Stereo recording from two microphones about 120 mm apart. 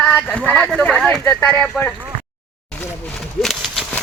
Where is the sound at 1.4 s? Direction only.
20° left (ahead or behind).